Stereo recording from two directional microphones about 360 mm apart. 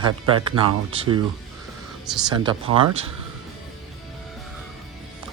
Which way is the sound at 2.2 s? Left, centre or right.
Centre.